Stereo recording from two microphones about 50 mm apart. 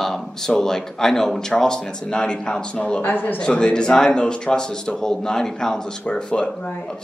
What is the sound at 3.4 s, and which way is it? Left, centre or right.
Speech, centre.